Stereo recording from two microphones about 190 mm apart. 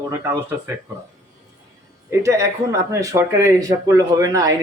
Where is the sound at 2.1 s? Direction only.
15° right (ahead or behind).